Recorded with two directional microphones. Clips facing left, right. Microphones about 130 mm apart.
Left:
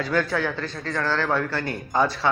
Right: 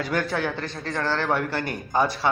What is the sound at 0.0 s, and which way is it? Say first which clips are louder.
Speech: left 2 dB; 20° right (ahead or behind).